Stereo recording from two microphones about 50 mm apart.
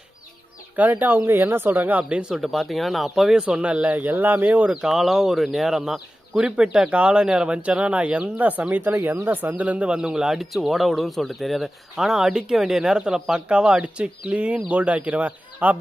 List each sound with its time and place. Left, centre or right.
0.8 s speech: right
1.2 s speech: right
2.3 s speech: centre
3.3 s speech: right
4.8 s speech: centre
6.3 s speech: centre
8.7 s speech: right
9.9 s speech: centre